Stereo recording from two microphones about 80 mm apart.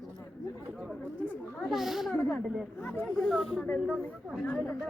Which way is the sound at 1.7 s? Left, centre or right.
Centre.